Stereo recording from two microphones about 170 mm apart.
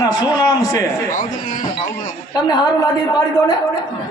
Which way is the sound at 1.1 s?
50° left (ahead or behind).